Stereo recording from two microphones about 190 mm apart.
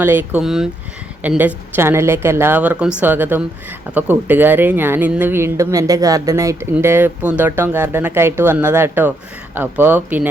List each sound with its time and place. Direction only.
0.0 s speech: 10° right (ahead or behind)